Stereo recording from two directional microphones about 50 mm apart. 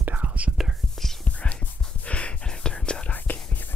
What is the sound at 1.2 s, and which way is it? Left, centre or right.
Whispering, left.